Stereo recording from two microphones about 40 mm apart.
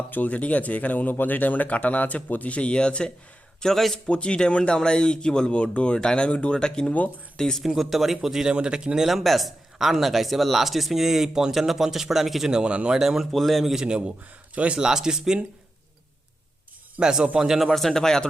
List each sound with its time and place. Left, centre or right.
0.1 s speech: left
2.6 s speech: left
3.6 s speech: centre
3.9 s speech: left
6.6 s speech: centre
7.6 s speech: centre
8.5 s speech: right
9.0 s speech: centre
13.3 s speech: centre
13.7 s speech: right
14.8 s speech: centre
17.0 s speech: centre
17.7 s speech: centre